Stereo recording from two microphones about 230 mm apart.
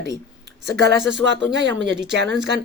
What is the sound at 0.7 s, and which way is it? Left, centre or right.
Speech, right.